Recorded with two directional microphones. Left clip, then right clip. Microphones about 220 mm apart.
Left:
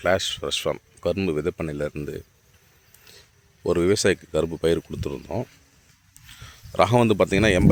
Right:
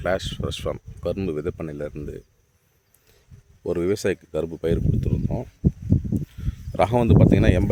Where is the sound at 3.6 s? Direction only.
10° right (ahead or behind).